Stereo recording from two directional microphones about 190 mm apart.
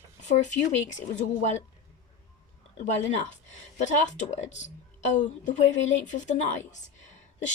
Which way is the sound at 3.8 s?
40° left (ahead or behind).